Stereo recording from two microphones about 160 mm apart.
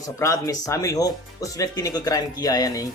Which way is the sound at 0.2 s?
20° left (ahead or behind).